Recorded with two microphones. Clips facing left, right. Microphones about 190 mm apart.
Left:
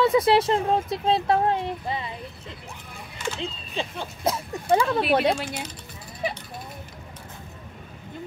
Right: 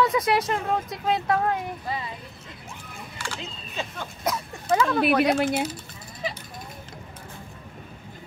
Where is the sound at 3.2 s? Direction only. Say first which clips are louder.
Left 7 dB; 25° left (ahead or behind).